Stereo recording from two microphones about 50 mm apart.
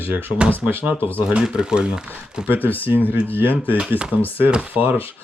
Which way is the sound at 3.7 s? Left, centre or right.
Right.